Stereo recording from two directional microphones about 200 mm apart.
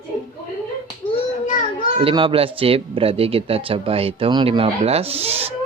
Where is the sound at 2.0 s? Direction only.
25° right (ahead or behind).